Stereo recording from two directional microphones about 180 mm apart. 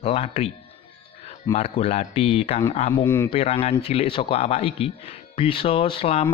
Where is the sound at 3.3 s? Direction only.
30° left (ahead or behind).